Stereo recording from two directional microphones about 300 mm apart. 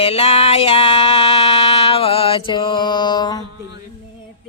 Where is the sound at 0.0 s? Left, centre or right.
Centre.